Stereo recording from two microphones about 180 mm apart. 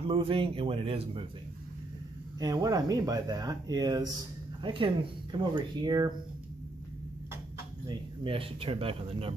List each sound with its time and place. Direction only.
0.1 s speech: 30° right (ahead or behind)
2.4 s speech: 20° right (ahead or behind)
7.9 s speech: 30° right (ahead or behind)